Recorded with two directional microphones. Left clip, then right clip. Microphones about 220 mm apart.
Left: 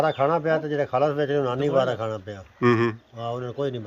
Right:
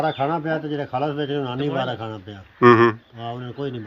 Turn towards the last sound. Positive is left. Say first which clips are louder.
# left 2 dB
turn(degrees=20)  # may be behind; listen again after turning